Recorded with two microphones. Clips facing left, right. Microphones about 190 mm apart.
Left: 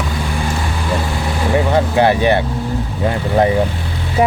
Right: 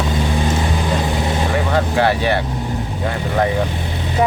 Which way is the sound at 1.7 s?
20° left (ahead or behind).